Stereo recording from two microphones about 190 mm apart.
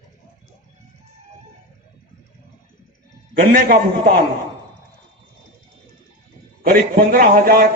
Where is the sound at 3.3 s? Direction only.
45° right (ahead or behind).